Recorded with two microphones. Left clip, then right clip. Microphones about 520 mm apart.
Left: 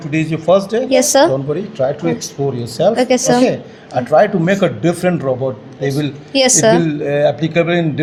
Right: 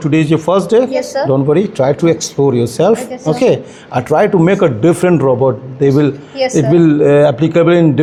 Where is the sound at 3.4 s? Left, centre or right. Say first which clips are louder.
Right 5 dB; right.